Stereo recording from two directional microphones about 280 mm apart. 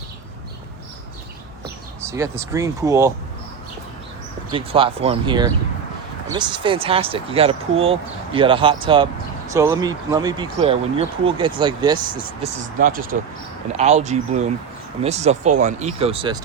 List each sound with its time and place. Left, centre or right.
2.0 s speech: centre
4.5 s speech: centre
12.8 s speech: right